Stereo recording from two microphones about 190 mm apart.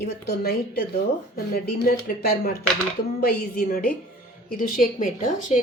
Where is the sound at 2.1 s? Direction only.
45° left (ahead or behind).